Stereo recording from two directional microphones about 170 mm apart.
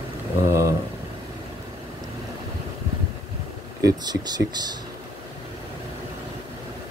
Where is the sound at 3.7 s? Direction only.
20° right (ahead or behind).